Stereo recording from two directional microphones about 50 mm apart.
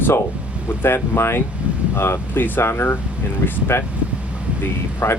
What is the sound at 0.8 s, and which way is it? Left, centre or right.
Speech, left.